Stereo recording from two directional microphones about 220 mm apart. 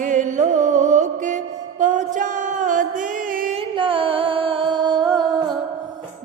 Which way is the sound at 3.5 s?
25° right (ahead or behind).